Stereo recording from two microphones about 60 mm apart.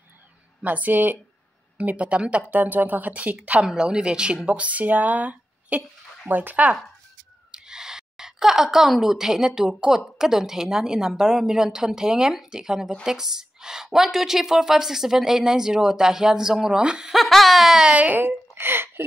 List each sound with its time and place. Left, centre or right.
0.6 s speech: right
2.5 s speech: right
3.6 s a woman's voice: centre
7.5 s a woman's voice: centre
17.2 s a sound: centre
17.8 s speech: right